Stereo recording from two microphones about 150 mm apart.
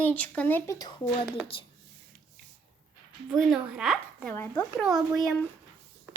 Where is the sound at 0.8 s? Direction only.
25° left (ahead or behind).